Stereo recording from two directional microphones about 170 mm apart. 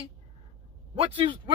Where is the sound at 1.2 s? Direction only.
30° right (ahead or behind).